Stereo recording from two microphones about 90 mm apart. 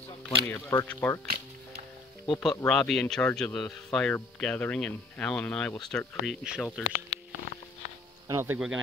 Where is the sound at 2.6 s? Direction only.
10° left (ahead or behind).